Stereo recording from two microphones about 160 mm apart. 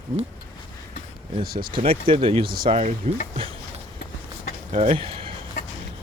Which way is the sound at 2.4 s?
65° right (ahead or behind).